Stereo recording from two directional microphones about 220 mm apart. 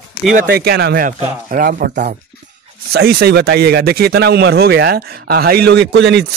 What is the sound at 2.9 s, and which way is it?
Speech, 45° right (ahead or behind).